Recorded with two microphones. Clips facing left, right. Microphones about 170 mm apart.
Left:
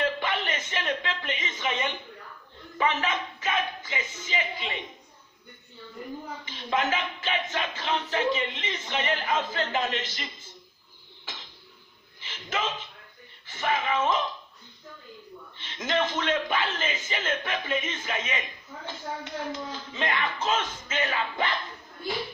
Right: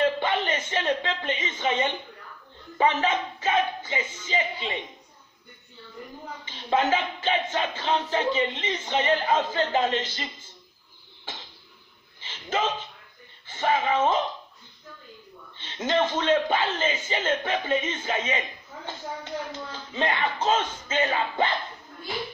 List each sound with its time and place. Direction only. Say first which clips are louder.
0.0 s a sound: right 4 dB; 30° right (ahead or behind)
2.8 s speech: right 4 dB; 30° right (ahead or behind)
6.4 s speech: right 4 dB; 30° right (ahead or behind)
12.2 s speech: right 4 dB; 30° right (ahead or behind)
15.5 s speech: right 3 dB; 30° right (ahead or behind)